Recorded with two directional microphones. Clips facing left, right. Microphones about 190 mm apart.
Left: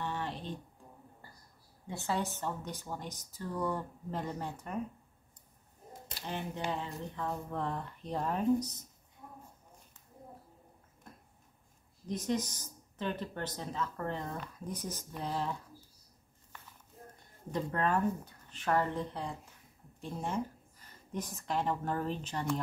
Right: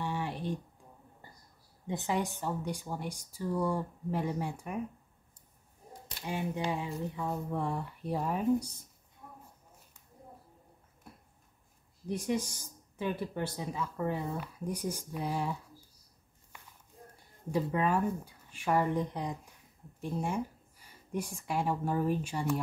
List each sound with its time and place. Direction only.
0.0 s a sound: 10° right (ahead or behind)
1.9 s speech: 15° right (ahead or behind)
6.2 s speech: 10° right (ahead or behind)
12.1 s speech: 10° right (ahead or behind)
16.5 s a sound: 10° right (ahead or behind)
17.5 s a woman's voice: 10° right (ahead or behind)